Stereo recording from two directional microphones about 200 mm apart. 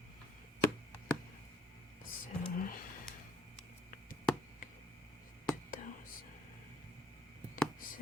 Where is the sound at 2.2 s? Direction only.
45° left (ahead or behind).